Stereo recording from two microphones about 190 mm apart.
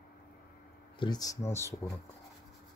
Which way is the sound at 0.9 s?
20° left (ahead or behind).